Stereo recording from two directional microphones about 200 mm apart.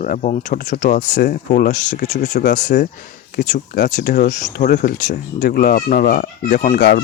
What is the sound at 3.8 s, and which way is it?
Speech, 55° left (ahead or behind).